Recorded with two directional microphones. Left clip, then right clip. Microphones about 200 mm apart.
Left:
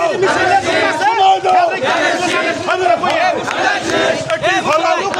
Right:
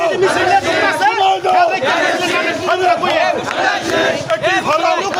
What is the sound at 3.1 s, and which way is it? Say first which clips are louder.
Crowd: even; centre (ahead or behind).